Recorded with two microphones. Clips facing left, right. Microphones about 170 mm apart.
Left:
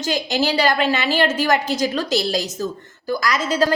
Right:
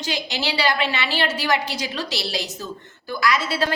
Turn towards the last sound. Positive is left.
turn(degrees=40)  # may be behind; listen again after turning